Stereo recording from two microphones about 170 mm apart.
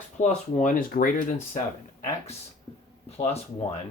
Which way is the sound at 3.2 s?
35° left (ahead or behind).